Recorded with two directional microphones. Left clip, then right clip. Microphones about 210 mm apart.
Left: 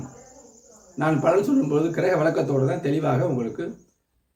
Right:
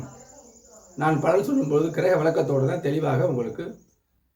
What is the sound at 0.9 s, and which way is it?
A man's voice, 5° left (ahead or behind).